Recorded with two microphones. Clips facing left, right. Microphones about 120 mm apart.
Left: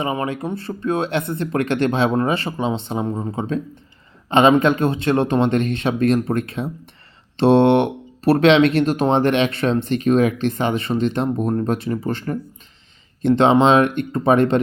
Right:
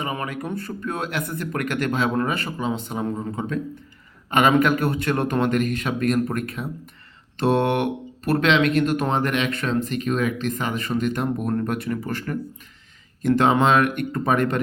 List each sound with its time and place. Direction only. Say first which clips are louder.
0.0 s speech: left 5 dB; 30° left (ahead or behind)